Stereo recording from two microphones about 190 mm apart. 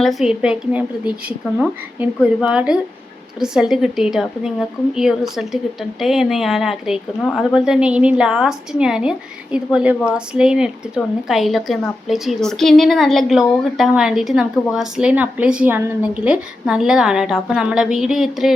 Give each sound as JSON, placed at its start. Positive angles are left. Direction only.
{"t": 0.0, "sound": "a woman's voice", "side_deg": 0}